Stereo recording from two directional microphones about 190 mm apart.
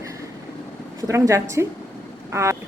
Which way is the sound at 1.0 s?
15° right (ahead or behind).